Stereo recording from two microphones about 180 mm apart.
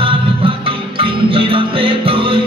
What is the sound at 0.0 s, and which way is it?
Music, 30° right (ahead or behind).